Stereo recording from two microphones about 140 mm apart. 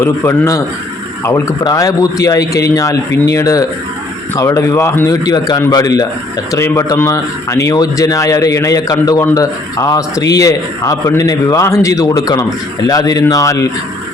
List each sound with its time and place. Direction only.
0.0 s a man's voice: 20° left (ahead or behind)